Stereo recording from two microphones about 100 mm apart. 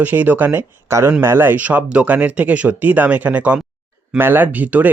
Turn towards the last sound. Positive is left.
turn(degrees=-15)  # may be behind; listen again after turning